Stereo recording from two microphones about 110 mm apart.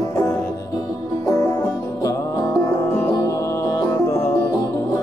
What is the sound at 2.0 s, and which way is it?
Music, 30° left (ahead or behind).